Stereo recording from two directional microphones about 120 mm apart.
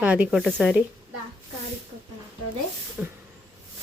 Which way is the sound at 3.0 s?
15° right (ahead or behind).